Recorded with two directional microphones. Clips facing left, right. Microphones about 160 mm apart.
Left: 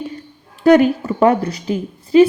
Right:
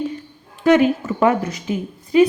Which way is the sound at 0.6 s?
35° left (ahead or behind).